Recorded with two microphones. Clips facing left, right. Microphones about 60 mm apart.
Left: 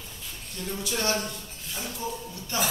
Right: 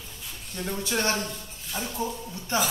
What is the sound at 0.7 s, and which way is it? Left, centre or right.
Speech, right.